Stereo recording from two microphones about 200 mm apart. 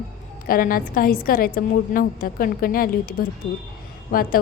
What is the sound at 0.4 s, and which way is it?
A woman's voice, 45° left (ahead or behind).